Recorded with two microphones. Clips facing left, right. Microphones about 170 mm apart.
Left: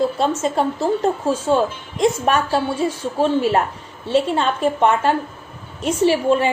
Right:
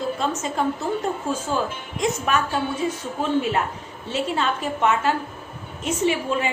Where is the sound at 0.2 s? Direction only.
30° left (ahead or behind).